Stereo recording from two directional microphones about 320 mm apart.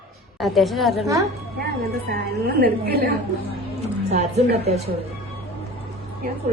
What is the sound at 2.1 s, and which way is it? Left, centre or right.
A woman's voice, right.